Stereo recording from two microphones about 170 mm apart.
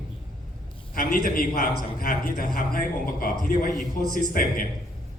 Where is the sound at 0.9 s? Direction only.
60° left (ahead or behind).